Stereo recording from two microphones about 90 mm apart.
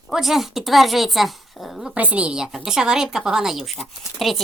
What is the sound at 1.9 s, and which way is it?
A woman's voice, 15° right (ahead or behind).